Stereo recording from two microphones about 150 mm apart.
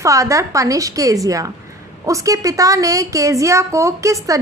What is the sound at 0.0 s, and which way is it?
A woman's voice, 20° right (ahead or behind).